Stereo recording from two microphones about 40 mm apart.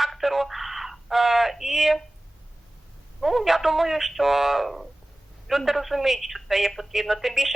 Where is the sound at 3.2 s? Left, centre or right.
Centre.